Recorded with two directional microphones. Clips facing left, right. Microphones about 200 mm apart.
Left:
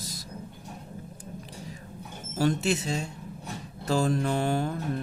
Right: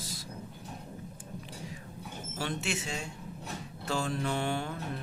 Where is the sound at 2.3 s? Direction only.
40° left (ahead or behind).